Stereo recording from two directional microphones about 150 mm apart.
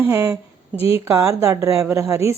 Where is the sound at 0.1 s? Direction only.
20° right (ahead or behind).